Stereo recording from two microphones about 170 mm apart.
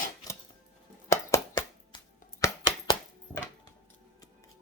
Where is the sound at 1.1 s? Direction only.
20° left (ahead or behind).